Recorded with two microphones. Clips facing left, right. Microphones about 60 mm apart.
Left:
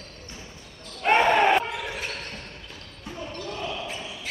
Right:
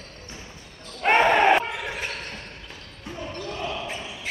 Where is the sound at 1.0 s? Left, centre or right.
Right.